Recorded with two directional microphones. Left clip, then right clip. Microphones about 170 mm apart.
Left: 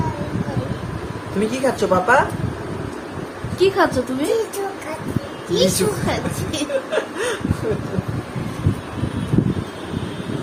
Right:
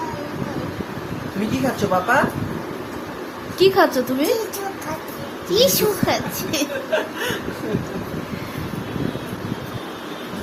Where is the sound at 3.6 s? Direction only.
20° right (ahead or behind).